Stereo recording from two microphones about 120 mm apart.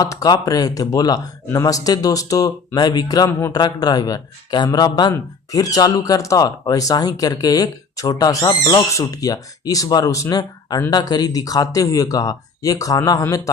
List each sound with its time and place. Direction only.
0.0 s speech: 30° left (ahead or behind)